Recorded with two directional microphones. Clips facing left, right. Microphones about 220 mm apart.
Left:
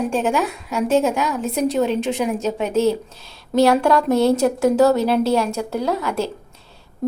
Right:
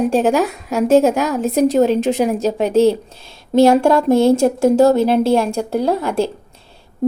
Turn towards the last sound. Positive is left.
turn(degrees=-30)  # may be behind; listen again after turning